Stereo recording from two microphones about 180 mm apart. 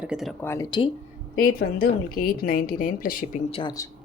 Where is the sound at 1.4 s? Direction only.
55° left (ahead or behind).